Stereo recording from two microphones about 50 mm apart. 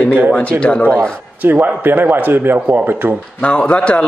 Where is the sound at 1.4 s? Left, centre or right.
Right.